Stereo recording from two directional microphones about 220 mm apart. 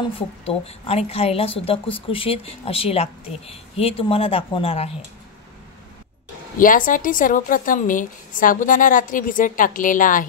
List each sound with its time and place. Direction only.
0.5 s speech: 25° left (ahead or behind)
6.6 s a woman's voice: 40° left (ahead or behind)